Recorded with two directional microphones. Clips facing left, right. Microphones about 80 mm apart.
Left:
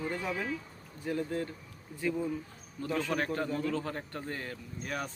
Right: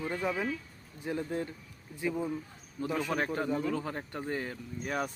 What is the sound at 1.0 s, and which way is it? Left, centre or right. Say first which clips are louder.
A man's voice: even; right.